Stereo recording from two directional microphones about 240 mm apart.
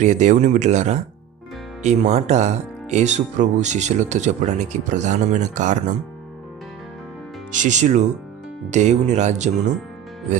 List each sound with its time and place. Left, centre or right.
0.0 s speech: right
7.5 s speech: right